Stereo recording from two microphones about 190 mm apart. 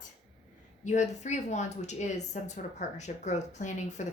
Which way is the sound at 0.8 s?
40° left (ahead or behind).